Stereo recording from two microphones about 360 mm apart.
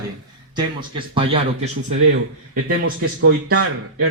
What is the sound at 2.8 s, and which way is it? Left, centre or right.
Speech, right.